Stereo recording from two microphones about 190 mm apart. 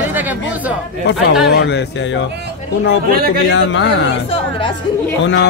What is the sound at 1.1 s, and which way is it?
Speech, 65° left (ahead or behind).